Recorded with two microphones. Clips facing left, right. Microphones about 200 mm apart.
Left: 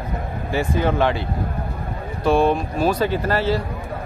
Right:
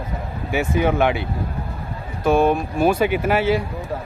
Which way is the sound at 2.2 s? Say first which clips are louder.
Right 1 dB; 5° right (ahead or behind).